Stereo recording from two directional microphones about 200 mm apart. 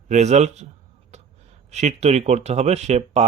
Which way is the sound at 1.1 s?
35° right (ahead or behind).